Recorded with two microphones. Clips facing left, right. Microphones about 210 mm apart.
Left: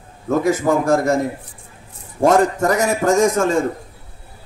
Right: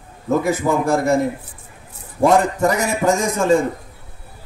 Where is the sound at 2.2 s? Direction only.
45° left (ahead or behind).